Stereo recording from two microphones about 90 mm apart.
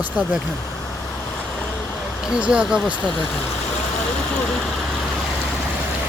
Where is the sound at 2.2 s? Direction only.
10° right (ahead or behind).